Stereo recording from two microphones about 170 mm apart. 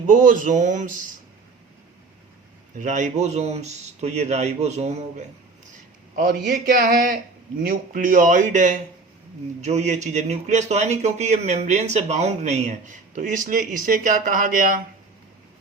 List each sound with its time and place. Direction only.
0.1 s a man's voice: 50° right (ahead or behind)
2.7 s speech: 45° right (ahead or behind)
6.1 s a man's voice: 55° right (ahead or behind)